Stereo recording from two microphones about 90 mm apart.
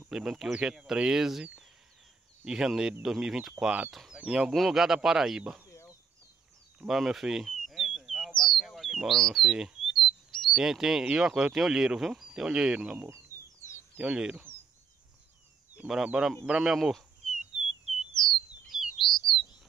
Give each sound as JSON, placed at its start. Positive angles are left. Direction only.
{"t": 0.1, "sound": "speech", "side_deg": -5}
{"t": 5.7, "sound": "a sound", "side_deg": 35}
{"t": 6.8, "sound": "bird", "side_deg": -5}
{"t": 10.6, "sound": "speech", "side_deg": -5}
{"t": 15.9, "sound": "speech", "side_deg": -5}
{"t": 18.2, "sound": "a sound", "side_deg": 5}
{"t": 18.7, "sound": "chirp", "side_deg": 0}